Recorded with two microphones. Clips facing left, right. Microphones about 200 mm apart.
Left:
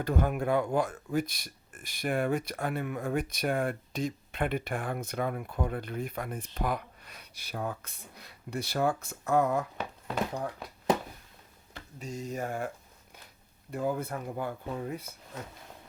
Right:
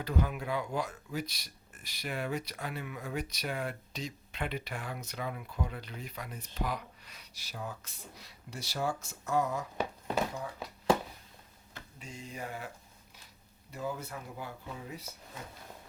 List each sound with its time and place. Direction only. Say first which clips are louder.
0.0 s speech: left 5 dB; 50° left (ahead or behind)
11.9 s speech: left 8 dB; 40° left (ahead or behind)